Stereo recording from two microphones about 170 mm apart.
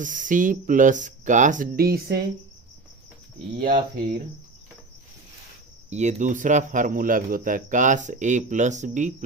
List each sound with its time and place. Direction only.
0.0 s speech: 50° right (ahead or behind); by 2.2 s 65° right (ahead or behind)
3.6 s speech: 55° right (ahead or behind)
5.9 s speech: 40° right (ahead or behind)